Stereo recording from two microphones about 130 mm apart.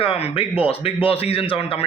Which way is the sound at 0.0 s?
45° left (ahead or behind).